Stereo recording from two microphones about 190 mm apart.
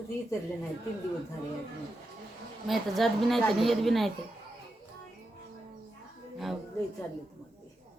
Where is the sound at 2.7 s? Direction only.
Centre (ahead or behind).